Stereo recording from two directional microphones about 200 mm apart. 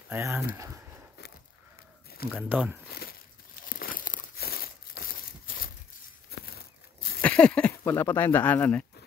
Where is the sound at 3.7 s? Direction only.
45° left (ahead or behind).